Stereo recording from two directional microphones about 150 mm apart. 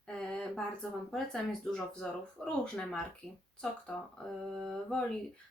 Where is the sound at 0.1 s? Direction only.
5° left (ahead or behind).